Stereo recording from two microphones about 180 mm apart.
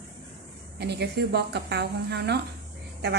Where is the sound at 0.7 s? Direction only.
65° right (ahead or behind).